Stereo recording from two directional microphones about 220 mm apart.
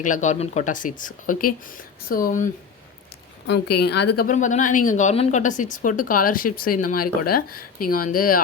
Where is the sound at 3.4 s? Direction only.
50° left (ahead or behind).